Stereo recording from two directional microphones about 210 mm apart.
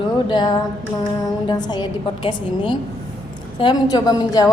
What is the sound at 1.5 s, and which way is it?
A woman's voice, 20° left (ahead or behind).